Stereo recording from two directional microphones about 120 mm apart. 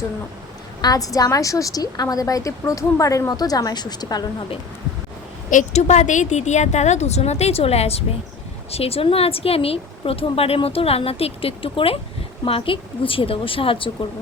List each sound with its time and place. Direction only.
0.8 s a woman's voice: 30° left (ahead or behind)
5.5 s a woman's voice: 80° left; by 13.9 s 45° left (ahead or behind)